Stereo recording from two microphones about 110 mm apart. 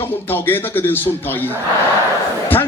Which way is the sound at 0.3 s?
20° left (ahead or behind).